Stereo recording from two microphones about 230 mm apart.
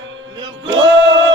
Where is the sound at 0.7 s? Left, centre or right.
Right.